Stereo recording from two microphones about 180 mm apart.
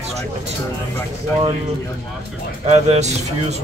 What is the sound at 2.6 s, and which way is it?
Speech, 35° right (ahead or behind).